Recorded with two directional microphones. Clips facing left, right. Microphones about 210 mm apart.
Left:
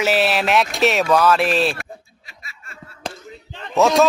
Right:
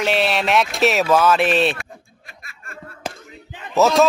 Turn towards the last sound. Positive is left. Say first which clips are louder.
# even
turn(degrees=0)  # may be behind; listen again after turning